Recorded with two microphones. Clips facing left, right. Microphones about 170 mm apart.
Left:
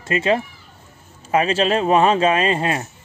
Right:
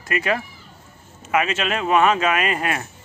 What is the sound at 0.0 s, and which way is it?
Speech, 25° left (ahead or behind).